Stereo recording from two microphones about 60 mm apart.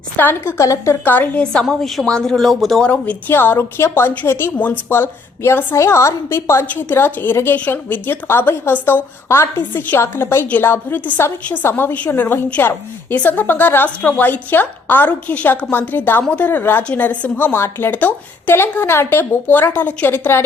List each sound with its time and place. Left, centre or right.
0.4 s a woman's voice: left
1.0 s a woman's voice: left
1.6 s speech: centre
2.0 s speech: centre
2.8 s a woman's voice: left
3.3 s a woman's voice: left
4.5 s a woman's voice: left
4.9 s a woman's voice: left
6.7 s a woman's voice: left
19.5 s a woman's voice: left